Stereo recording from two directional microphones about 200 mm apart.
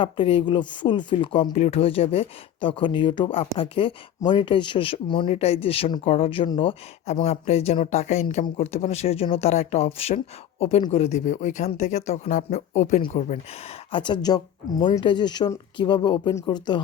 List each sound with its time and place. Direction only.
0.0 s speech: 25° left (ahead or behind)
13.9 s speech: 25° left (ahead or behind)